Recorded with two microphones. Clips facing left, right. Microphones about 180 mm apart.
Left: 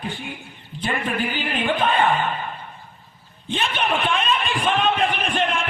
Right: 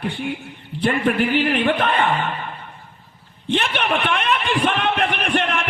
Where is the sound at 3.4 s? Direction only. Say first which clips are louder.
Right 3 dB; 70° right (ahead or behind).